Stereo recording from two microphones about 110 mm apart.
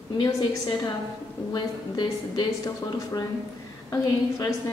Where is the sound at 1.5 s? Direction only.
45° left (ahead or behind).